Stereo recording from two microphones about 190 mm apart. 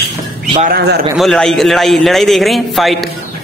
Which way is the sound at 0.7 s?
60° right (ahead or behind).